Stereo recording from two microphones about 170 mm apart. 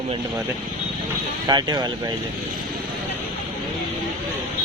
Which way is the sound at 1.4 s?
25° right (ahead or behind).